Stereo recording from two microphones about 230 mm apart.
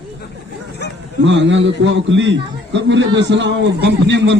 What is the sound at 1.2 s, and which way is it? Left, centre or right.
A man's voice, right.